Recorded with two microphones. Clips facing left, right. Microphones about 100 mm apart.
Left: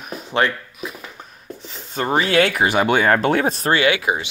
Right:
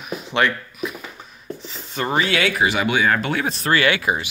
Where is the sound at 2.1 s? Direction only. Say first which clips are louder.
Left 3 dB; 40° left (ahead or behind).